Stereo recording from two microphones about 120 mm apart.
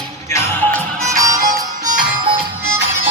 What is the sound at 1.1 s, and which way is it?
Music, 30° right (ahead or behind).